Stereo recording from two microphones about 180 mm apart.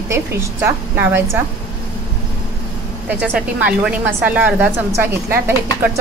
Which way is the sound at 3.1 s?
10° right (ahead or behind).